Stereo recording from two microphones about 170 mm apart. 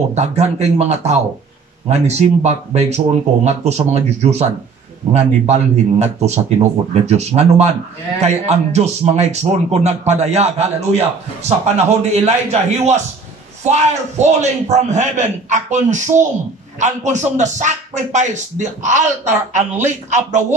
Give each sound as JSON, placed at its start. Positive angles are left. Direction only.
{"t": 0.1, "sound": "a man's voice", "side_deg": -40}